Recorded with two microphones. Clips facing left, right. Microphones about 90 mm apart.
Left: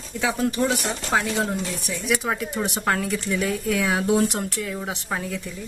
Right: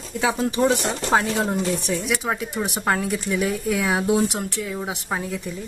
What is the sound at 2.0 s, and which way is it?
Speech, centre (ahead or behind).